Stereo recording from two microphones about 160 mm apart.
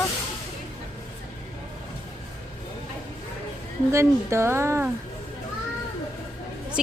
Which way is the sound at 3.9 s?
15° right (ahead or behind).